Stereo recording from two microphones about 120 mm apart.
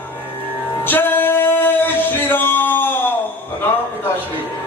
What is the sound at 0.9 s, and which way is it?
Male singing, 15° left (ahead or behind).